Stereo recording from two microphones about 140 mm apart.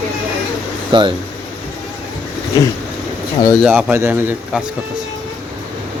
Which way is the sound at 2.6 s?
25° left (ahead or behind).